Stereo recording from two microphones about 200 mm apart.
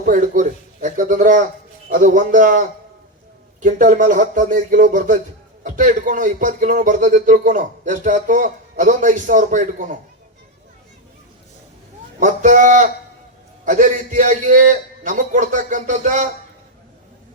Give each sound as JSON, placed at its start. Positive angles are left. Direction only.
{"t": 0.0, "sound": "speech", "side_deg": -40}
{"t": 12.2, "sound": "speech", "side_deg": -40}